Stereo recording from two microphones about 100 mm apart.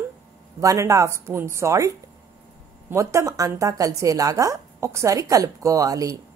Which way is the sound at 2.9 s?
30° right (ahead or behind).